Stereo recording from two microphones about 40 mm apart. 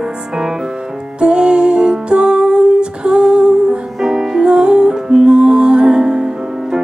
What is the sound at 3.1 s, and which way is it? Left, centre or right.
Humming, centre.